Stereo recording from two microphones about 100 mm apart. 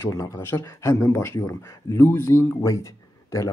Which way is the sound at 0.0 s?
35° left (ahead or behind).